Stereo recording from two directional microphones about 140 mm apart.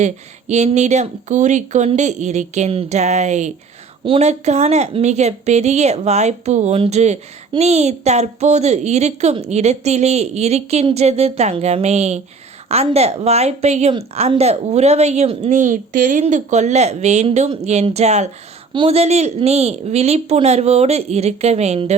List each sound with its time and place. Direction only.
0.0 s speech: 55° right (ahead or behind)
4.0 s a woman's voice: 45° right (ahead or behind)
6.7 s speech: 40° right (ahead or behind)
7.5 s a woman's voice: 50° right (ahead or behind)
18.7 s a woman's voice: 40° right (ahead or behind)